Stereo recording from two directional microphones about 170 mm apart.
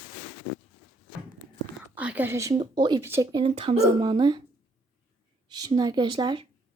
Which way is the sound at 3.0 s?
15° right (ahead or behind).